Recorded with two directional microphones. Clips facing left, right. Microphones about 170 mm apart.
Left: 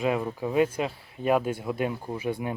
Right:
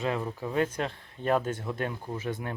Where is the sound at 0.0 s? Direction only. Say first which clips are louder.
Left 4 dB; 10° left (ahead or behind).